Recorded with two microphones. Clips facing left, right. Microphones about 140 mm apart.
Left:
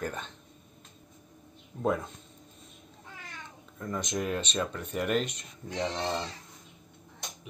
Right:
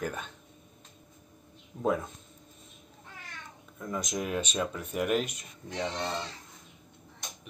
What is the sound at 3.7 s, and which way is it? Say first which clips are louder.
Speech: left 1 dB; 5° right (ahead or behind).